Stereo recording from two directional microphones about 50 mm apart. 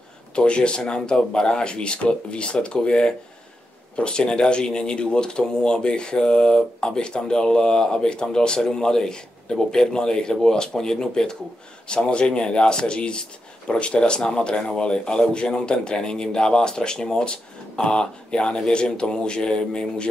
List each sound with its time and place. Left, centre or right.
0.4 s speech: centre